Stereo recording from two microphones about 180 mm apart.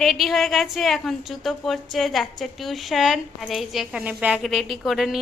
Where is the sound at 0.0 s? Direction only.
Centre (ahead or behind).